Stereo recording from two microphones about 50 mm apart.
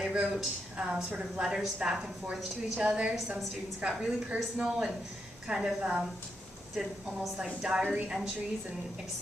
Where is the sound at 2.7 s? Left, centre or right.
Right.